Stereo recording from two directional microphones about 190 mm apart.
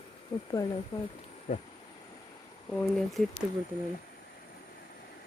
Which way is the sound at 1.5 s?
45° left (ahead or behind).